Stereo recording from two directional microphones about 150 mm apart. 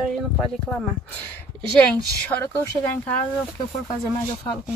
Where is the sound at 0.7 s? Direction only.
5° left (ahead or behind).